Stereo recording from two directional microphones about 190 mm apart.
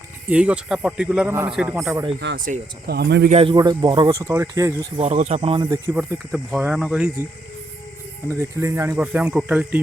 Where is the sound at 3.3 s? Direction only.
30° right (ahead or behind).